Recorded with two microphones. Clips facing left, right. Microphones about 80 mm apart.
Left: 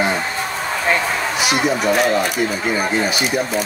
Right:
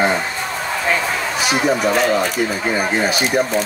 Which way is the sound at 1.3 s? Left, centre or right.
Centre.